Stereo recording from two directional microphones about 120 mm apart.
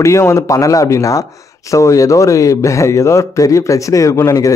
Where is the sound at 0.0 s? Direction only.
25° left (ahead or behind).